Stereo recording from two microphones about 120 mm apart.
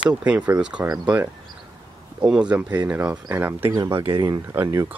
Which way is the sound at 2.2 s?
10° right (ahead or behind).